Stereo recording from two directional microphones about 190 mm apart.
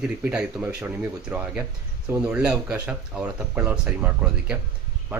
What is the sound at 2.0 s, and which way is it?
Speech, 5° right (ahead or behind).